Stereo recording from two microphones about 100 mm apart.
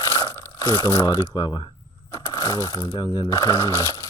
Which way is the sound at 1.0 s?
40° left (ahead or behind).